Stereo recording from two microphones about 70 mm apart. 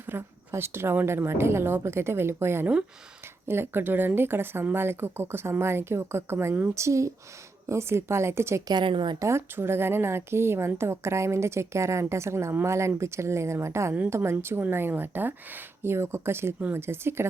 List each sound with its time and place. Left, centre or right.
0.0 s speech: right
6.7 s speech: right
8.6 s a woman's voice: right
9.2 s speech: right